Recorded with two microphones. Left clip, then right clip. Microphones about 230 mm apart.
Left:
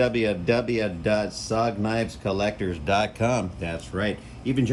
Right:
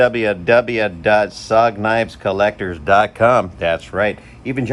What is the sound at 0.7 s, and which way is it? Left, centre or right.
Speech, right.